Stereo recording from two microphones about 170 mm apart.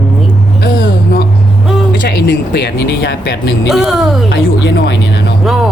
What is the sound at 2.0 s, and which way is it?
Speech, 80° left.